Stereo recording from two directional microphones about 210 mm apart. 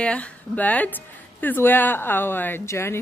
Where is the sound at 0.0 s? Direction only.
5° left (ahead or behind).